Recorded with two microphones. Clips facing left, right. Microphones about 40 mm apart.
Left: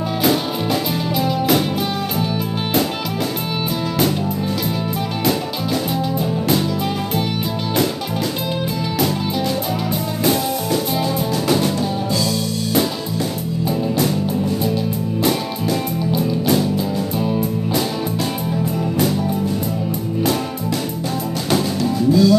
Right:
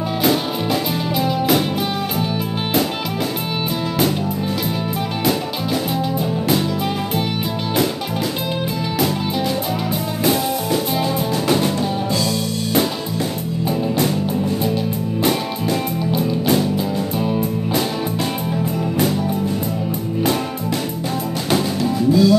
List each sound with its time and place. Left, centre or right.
0.2 s music: centre
10.2 s music: right
22.1 s music: centre